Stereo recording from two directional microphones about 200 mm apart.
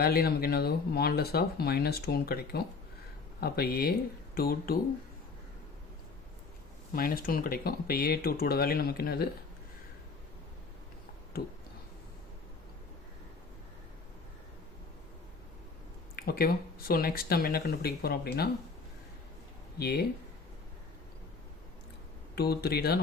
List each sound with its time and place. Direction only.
0.0 s speech: 50° left (ahead or behind)
6.9 s speech: 45° left (ahead or behind)
16.1 s speech: 45° left (ahead or behind)
19.8 s speech: 50° left (ahead or behind)
22.4 s speech: 50° left (ahead or behind)